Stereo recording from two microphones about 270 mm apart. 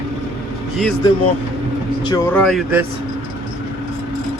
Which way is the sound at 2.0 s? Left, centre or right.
Centre.